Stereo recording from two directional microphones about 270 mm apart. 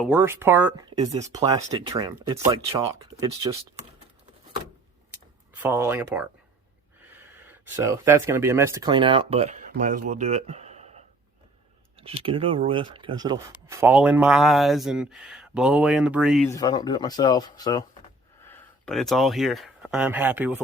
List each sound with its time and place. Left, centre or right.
0.0 s speech: centre
5.5 s speech: centre; by 10.0 s right
10.1 s a sound: right
11.9 s speech: right; by 16.5 s centre
16.5 s speech: centre
18.4 s speech: centre